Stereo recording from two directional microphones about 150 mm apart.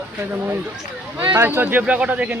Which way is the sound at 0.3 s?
15° right (ahead or behind).